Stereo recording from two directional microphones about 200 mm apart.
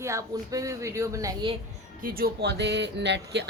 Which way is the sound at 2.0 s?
45° right (ahead or behind).